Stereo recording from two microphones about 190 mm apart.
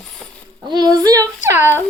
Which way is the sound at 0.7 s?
20° right (ahead or behind).